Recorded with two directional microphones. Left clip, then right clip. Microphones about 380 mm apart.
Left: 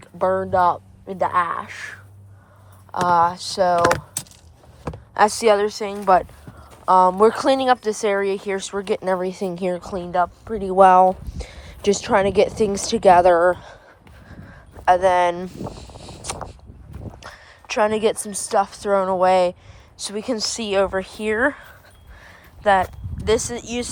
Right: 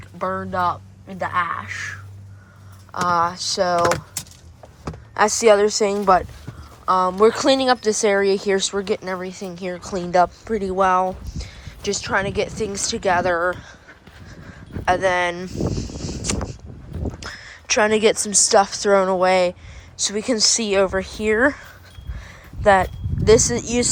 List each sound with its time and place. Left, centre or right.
0.2 s speech: centre
3.8 s speech: left
5.1 s speech: centre
14.8 s a sound: centre
17.2 s a woman's voice: centre
22.2 s a sound: centre